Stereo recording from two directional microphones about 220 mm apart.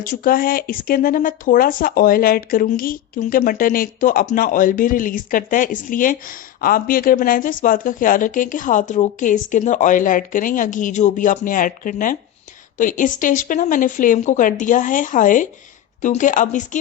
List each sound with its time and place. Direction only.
0.0 s speech: 40° left (ahead or behind)